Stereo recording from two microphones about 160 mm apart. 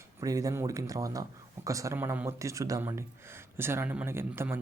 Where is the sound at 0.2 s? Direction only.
20° right (ahead or behind).